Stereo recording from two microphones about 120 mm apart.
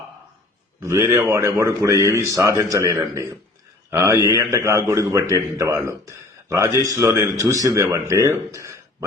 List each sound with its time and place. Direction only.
0.8 s a man's voice: 25° right (ahead or behind)